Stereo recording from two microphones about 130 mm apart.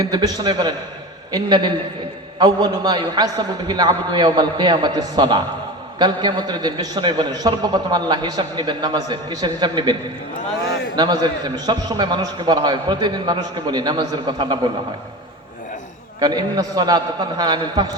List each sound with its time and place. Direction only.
0.0 s a man's voice: 30° right (ahead or behind)
10.9 s a man's voice: 35° right (ahead or behind)
16.2 s a man's voice: 30° right (ahead or behind)